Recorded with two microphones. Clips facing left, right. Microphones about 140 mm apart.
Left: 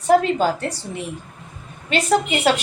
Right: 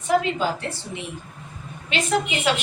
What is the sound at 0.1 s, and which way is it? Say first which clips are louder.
A woman's voice: left 5 dB; 40° left (ahead or behind).